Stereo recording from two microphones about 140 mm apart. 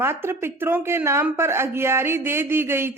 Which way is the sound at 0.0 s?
20° right (ahead or behind).